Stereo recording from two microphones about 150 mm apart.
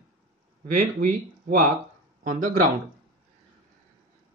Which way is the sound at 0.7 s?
60° right (ahead or behind).